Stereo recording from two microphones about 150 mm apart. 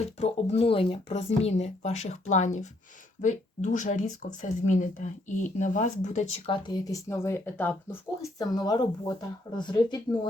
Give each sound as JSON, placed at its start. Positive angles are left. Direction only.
{"t": 0.2, "sound": "speech", "side_deg": 40}
{"t": 6.5, "sound": "speech", "side_deg": 30}